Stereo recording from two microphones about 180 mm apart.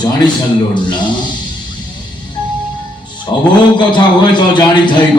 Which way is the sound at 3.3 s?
20° left (ahead or behind).